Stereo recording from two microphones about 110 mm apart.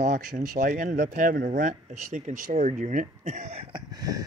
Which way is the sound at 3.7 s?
40° right (ahead or behind).